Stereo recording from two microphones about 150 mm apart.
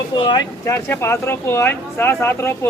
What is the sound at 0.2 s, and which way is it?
Speech, 30° left (ahead or behind).